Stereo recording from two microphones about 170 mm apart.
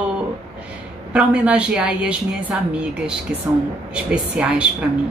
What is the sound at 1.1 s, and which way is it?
Speech, 5° right (ahead or behind).